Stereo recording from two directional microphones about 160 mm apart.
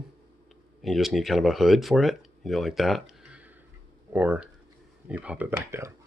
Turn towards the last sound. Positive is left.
turn(degrees=-15)  # may be behind; listen again after turning